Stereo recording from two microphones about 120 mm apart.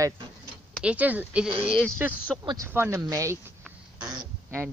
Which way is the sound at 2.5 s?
20° right (ahead or behind).